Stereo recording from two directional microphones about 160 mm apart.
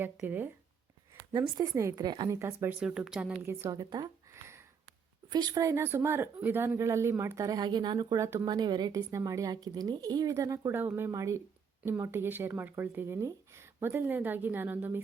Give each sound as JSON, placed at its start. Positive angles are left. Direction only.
{"t": 0.0, "sound": "speech", "side_deg": -10}
{"t": 1.3, "sound": "speech", "side_deg": -25}
{"t": 2.4, "sound": "speech", "side_deg": -15}
{"t": 3.4, "sound": "speech", "side_deg": -15}